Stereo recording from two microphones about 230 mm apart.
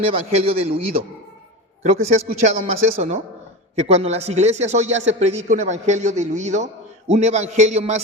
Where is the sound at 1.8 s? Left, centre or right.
Right.